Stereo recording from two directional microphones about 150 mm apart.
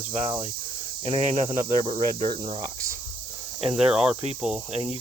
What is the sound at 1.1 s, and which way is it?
Speech, 30° right (ahead or behind).